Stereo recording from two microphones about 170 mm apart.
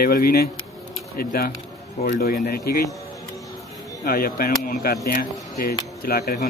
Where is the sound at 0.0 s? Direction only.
60° left (ahead or behind).